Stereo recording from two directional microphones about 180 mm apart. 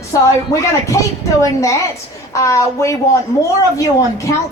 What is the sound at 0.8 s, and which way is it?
Speech, 15° left (ahead or behind).